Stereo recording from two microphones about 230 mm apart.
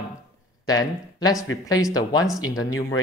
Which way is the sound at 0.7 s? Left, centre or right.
Centre.